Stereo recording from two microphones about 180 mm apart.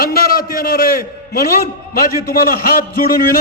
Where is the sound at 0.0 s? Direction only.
55° left (ahead or behind).